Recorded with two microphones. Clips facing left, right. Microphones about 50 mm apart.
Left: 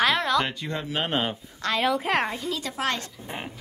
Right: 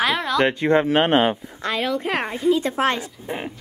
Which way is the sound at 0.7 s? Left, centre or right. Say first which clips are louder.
Right 9 dB; right.